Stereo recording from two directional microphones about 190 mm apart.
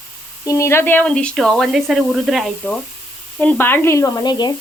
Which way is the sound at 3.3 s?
10° left (ahead or behind).